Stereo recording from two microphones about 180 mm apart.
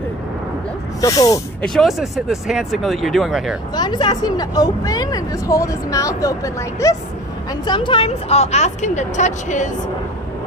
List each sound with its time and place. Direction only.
1.0 s speech: 20° left (ahead or behind)
1.6 s speech: centre (ahead or behind)
3.7 s a woman's voice: 25° left (ahead or behind); by 9.7 s 45° left (ahead or behind)